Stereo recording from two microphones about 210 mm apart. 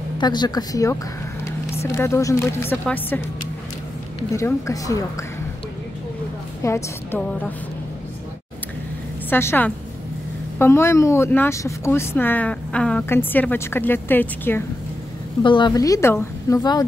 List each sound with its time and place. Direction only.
0.2 s speech: 20° left (ahead or behind)
4.3 s speech: 15° left (ahead or behind)
6.6 s speech: 10° left (ahead or behind)
9.3 s speech: 10° left (ahead or behind)
15.4 s speech: 20° left (ahead or behind)